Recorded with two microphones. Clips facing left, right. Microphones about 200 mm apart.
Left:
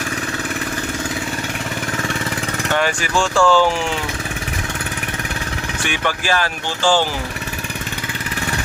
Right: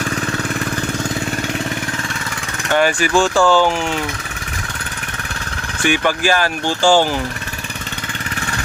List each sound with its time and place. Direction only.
3.2 s speech: 5° right (ahead or behind)
6.2 s speech: 40° right (ahead or behind)
6.7 s speech: 15° right (ahead or behind)